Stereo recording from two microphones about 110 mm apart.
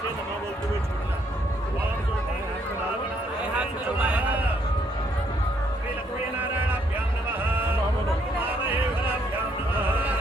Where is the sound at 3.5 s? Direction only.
10° right (ahead or behind).